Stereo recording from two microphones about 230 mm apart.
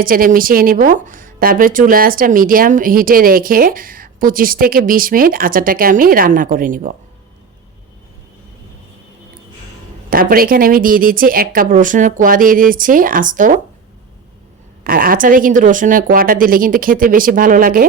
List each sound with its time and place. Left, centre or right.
0.0 s speech: right
10.1 s speech: right
14.8 s speech: right